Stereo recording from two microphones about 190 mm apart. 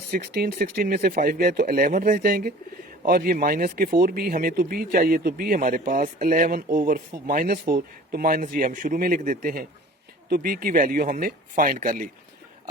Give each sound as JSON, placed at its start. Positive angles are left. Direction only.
{"t": 0.1, "sound": "speech", "side_deg": -50}